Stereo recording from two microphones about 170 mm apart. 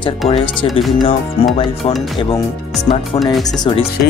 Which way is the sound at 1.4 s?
35° left (ahead or behind).